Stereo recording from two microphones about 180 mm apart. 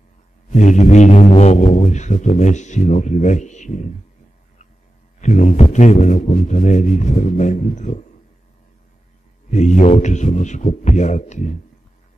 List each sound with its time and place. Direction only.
0.5 s speech: 40° left (ahead or behind)
5.2 s speech: 40° left (ahead or behind)
9.5 s speech: 40° left (ahead or behind)